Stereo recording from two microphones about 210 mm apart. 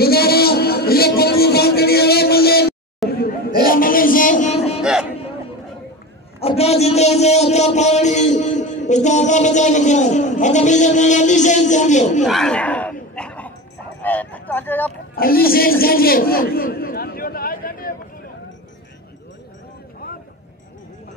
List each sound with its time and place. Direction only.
0.0 s music: 45° left (ahead or behind)
3.1 s a sound: 45° left (ahead or behind); by 4.8 s 30° left (ahead or behind)
6.4 s a man's voice: 30° left (ahead or behind)
12.3 s speech: centre (ahead or behind)
13.1 s bow-wow: 5° left (ahead or behind)
14.0 s vehicle: 5° left (ahead or behind)
15.1 s a sound: 45° left (ahead or behind)